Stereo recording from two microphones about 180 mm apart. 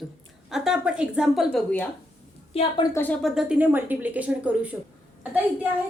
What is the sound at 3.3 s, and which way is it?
Speech, 10° right (ahead or behind).